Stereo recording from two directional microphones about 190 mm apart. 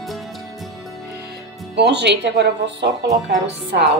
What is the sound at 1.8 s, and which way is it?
Speech, 65° right (ahead or behind).